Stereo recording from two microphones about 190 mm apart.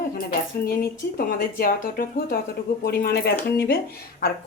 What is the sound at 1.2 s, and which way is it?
A woman's voice, 45° left (ahead or behind).